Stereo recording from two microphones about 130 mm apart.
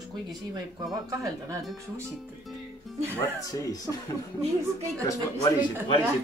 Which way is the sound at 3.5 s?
25° left (ahead or behind).